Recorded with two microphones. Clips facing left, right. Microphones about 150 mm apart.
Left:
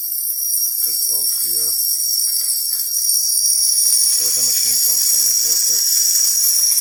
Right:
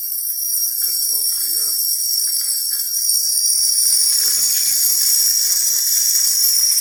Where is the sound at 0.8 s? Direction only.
20° left (ahead or behind).